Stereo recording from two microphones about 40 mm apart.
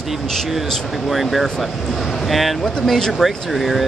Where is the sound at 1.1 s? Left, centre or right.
Centre.